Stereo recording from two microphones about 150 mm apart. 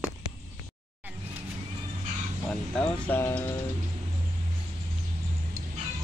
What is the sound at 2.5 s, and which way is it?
Music, 10° left (ahead or behind).